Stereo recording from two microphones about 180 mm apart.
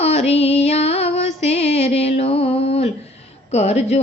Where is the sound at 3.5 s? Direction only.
35° left (ahead or behind).